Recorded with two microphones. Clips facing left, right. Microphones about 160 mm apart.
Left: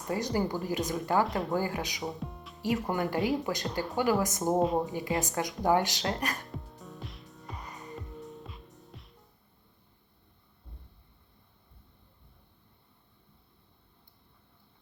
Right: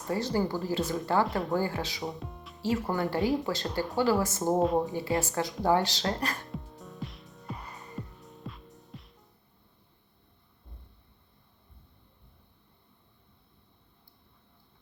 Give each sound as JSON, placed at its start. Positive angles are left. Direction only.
{"t": 0.1, "sound": "speech", "side_deg": 15}
{"t": 1.3, "sound": "a woman's voice", "side_deg": 0}
{"t": 1.5, "sound": "speech", "side_deg": 15}
{"t": 2.0, "sound": "music", "side_deg": 0}
{"t": 2.6, "sound": "speech", "side_deg": 15}
{"t": 3.2, "sound": "a woman's voice", "side_deg": 0}
{"t": 3.4, "sound": "speech", "side_deg": 15}
{"t": 4.5, "sound": "a woman's voice", "side_deg": 0}
{"t": 5.2, "sound": "speech", "side_deg": 15}
{"t": 6.5, "sound": "music", "side_deg": 0}